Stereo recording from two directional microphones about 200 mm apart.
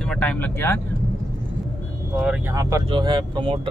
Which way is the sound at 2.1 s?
5° right (ahead or behind).